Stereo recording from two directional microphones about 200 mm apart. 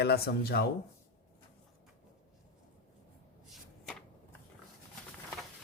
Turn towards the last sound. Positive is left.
turn(degrees=0)  # may be behind; listen again after turning